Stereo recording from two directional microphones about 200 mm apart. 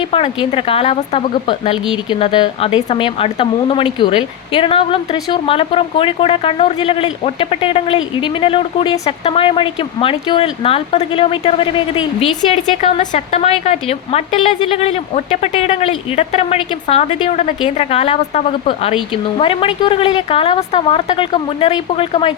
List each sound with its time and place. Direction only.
0.5 s a woman's voice: 30° left (ahead or behind)
12.8 s a woman's voice: 30° left (ahead or behind)